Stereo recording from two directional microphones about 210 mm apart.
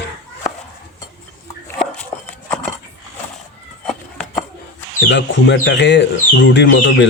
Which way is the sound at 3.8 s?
5° left (ahead or behind).